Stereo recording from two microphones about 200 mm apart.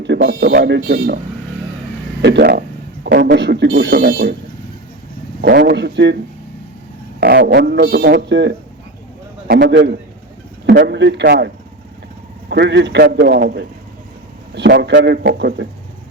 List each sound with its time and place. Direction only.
0.0 s speech: 60° right (ahead or behind)
2.2 s speech: 55° right (ahead or behind)
5.4 s speech: 55° right (ahead or behind)
7.2 s speech: 55° right (ahead or behind)